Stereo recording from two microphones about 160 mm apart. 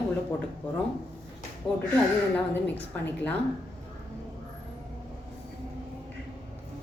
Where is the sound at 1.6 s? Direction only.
30° left (ahead or behind).